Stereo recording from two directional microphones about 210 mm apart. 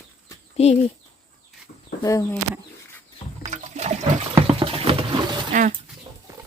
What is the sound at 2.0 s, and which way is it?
Speech, 15° left (ahead or behind).